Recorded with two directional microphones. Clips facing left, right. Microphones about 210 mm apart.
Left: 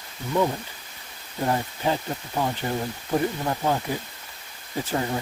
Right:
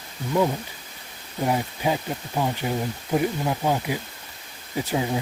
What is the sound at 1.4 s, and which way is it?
Speech, 10° right (ahead or behind).